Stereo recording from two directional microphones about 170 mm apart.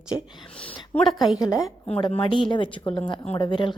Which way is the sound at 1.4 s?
20° left (ahead or behind).